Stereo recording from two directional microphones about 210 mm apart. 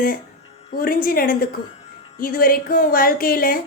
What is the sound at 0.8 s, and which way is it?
A woman's voice, 45° left (ahead or behind).